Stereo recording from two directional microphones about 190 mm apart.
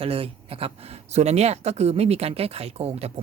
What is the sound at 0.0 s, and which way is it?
Speech, 30° right (ahead or behind).